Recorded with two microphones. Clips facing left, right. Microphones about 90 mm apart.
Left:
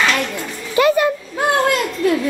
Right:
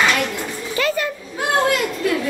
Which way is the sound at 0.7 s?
15° left (ahead or behind).